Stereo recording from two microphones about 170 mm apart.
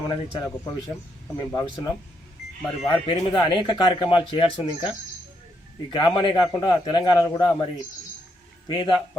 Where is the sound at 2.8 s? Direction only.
30° left (ahead or behind).